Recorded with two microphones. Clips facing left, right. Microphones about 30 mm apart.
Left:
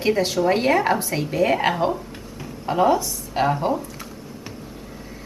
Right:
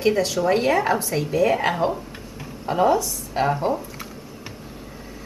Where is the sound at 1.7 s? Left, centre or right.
Centre.